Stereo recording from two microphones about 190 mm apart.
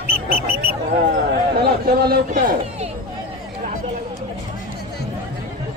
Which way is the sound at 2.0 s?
50° right (ahead or behind).